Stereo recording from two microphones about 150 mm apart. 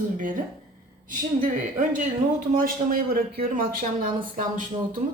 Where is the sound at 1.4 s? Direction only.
65° right (ahead or behind).